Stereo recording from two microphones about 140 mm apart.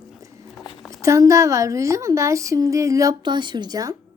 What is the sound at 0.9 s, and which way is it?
A woman's voice, 20° right (ahead or behind).